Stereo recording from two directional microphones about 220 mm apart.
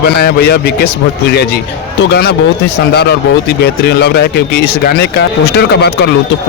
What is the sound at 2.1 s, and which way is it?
Speech, 50° left (ahead or behind).